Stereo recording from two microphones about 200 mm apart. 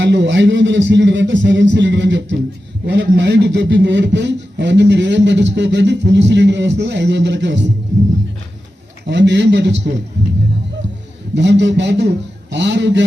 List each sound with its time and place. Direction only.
0.0 s a man's voice: 60° right (ahead or behind)
9.0 s a man's voice: 60° right (ahead or behind)
11.3 s a man's voice: 60° right (ahead or behind)